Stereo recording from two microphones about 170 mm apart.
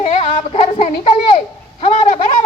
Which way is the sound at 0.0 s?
35° left (ahead or behind).